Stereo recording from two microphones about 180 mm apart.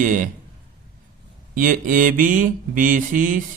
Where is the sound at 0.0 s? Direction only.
45° right (ahead or behind).